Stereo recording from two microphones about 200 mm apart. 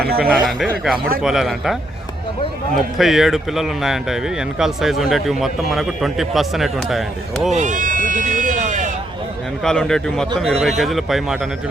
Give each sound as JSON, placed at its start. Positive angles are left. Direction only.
{"t": 0.0, "sound": "a man's voice", "side_deg": -50}
{"t": 0.4, "sound": "speech", "side_deg": 0}
{"t": 7.5, "sound": "a sound", "side_deg": -40}
{"t": 9.6, "sound": "speech", "side_deg": 5}